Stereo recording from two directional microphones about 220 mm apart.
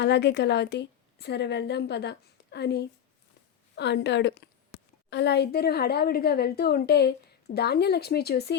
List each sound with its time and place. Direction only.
0.0 s a woman's voice: 50° left (ahead or behind)